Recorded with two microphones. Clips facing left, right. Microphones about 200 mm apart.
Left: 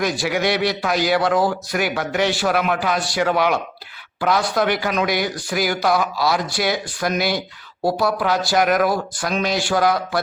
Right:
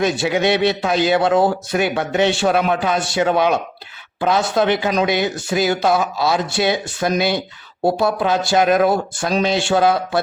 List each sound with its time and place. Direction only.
0.0 s a man's voice: 25° right (ahead or behind)